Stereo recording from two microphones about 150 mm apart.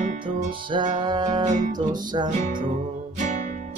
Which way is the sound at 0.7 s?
30° right (ahead or behind).